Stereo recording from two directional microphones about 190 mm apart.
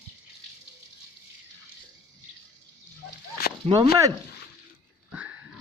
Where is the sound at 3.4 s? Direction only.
55° left (ahead or behind).